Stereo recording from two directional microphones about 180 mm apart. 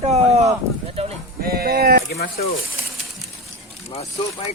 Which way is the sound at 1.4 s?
55° right (ahead or behind).